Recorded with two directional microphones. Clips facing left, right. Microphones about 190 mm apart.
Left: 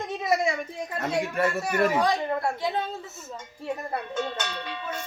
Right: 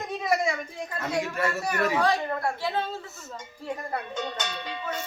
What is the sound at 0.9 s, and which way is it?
Speech, 20° left (ahead or behind).